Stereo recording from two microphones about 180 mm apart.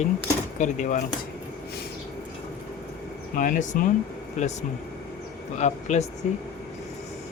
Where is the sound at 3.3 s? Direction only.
45° left (ahead or behind).